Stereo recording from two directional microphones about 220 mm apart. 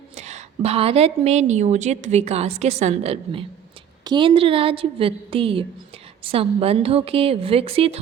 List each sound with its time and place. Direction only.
0.2 s a woman's voice: 30° right (ahead or behind)